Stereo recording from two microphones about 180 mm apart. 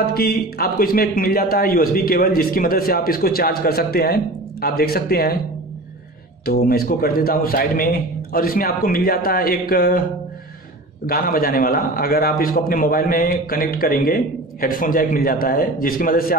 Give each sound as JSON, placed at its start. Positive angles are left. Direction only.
{"t": 0.1, "sound": "a man's voice", "side_deg": 60}
{"t": 6.4, "sound": "a man's voice", "side_deg": 55}
{"t": 11.1, "sound": "a man's voice", "side_deg": 55}